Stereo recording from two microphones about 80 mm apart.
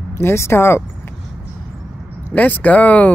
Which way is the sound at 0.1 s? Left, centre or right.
Left.